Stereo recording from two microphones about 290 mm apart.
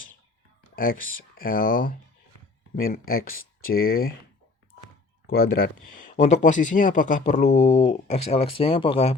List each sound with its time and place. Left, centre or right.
0.8 s speech: left
5.2 s speech: left